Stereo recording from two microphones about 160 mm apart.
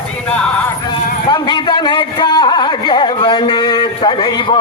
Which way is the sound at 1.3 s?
30° left (ahead or behind).